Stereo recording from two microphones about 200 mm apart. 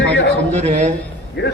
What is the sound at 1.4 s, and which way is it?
Speech, 55° left (ahead or behind).